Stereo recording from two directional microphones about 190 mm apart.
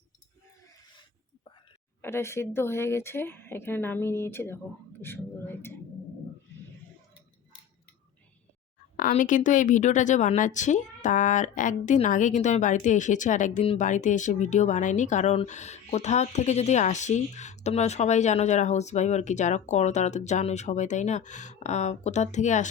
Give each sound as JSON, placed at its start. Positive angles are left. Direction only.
{"t": 2.0, "sound": "speech", "side_deg": 15}
{"t": 5.0, "sound": "a sound", "side_deg": 10}
{"t": 9.0, "sound": "a woman's voice", "side_deg": 45}